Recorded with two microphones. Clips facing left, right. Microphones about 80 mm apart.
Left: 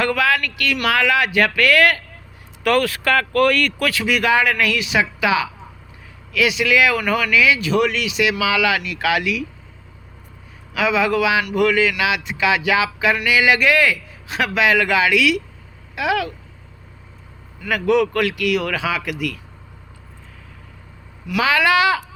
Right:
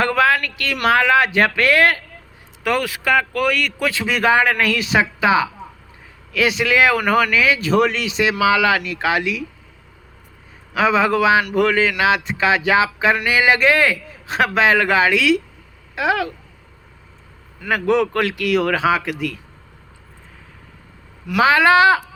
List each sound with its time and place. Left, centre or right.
0.0 s speech: right
2.6 s speech: centre
10.8 s speech: right
17.6 s speech: right
21.2 s speech: right